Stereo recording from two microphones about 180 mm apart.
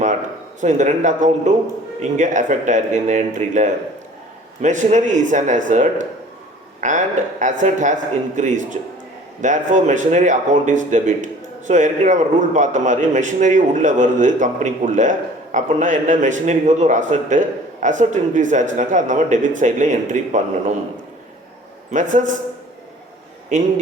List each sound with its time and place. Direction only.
0.6 s a man's voice: 40° right (ahead or behind)
21.9 s a man's voice: 45° right (ahead or behind)
23.5 s a man's voice: 45° right (ahead or behind)